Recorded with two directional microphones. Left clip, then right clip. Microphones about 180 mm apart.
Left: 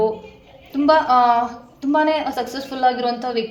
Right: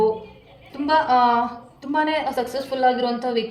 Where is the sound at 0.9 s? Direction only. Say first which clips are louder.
Left 3 dB; 35° left (ahead or behind).